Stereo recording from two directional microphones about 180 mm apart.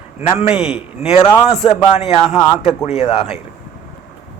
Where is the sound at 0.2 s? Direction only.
35° left (ahead or behind).